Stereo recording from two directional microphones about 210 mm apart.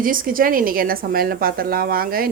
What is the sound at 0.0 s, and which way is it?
Speech, 40° right (ahead or behind).